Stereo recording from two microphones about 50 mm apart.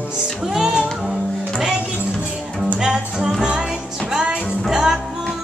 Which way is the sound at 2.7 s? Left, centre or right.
Centre.